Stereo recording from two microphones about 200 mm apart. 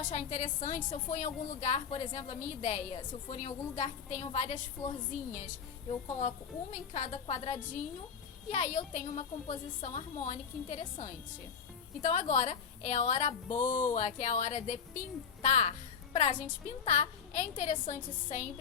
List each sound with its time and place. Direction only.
0.0 s a woman's voice: 40° left (ahead or behind)
6.1 s a woman's voice: 35° left (ahead or behind)